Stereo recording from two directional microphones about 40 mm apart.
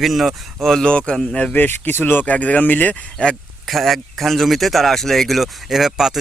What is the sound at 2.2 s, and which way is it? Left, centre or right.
Speech, left.